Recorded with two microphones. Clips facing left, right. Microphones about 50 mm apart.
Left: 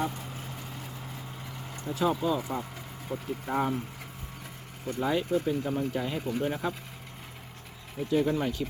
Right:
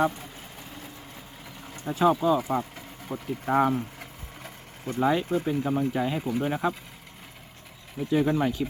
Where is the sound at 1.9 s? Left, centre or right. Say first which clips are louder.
Right 6 dB; right.